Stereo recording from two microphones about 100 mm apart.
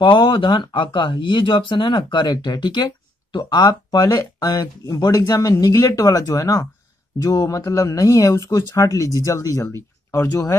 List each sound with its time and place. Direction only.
0.0 s speech: 55° left (ahead or behind); by 9.8 s 35° left (ahead or behind)